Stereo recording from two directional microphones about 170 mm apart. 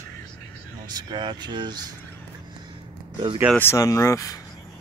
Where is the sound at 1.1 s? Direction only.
25° right (ahead or behind).